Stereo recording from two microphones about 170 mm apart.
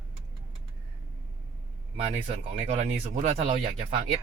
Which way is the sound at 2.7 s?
40° right (ahead or behind).